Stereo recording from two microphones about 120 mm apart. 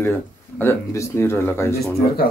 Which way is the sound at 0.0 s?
20° left (ahead or behind).